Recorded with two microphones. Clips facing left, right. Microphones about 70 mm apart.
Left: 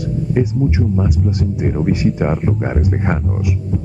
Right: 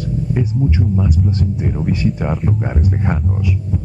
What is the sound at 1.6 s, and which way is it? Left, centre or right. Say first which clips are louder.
Speech: left 4 dB; left.